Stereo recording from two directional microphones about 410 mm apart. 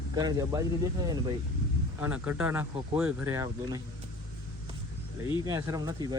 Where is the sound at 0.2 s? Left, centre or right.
Centre.